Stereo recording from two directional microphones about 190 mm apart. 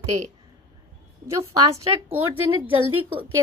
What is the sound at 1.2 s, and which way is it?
Speech, 15° right (ahead or behind).